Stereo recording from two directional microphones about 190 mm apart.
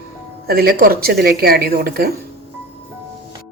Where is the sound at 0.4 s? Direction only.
55° right (ahead or behind).